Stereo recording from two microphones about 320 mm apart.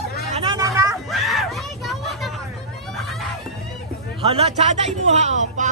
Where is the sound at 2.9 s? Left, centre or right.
Centre.